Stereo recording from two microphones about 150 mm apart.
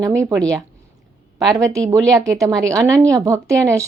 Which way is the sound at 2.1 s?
20° right (ahead or behind).